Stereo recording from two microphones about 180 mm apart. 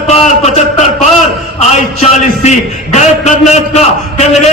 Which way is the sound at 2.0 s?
40° left (ahead or behind).